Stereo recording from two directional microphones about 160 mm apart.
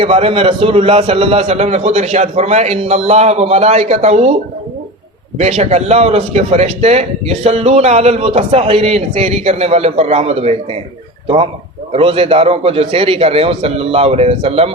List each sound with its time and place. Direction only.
0.0 s a man's voice: 35° right (ahead or behind)
5.4 s a man's voice: 45° right (ahead or behind)
11.9 s a man's voice: 35° right (ahead or behind)